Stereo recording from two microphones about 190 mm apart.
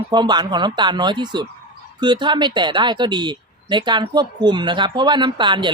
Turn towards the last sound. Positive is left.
turn(degrees=-25)  # may be behind; listen again after turning